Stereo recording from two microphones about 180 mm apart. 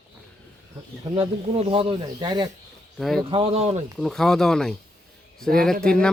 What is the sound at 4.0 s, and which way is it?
Speech, centre (ahead or behind).